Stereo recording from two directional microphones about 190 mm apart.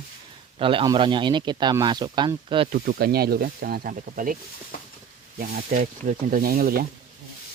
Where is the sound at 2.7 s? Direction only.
55° right (ahead or behind).